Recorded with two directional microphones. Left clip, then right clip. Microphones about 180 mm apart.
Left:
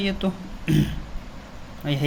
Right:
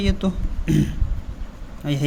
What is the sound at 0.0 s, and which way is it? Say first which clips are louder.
Speech: right 1 dB; 30° right (ahead or behind).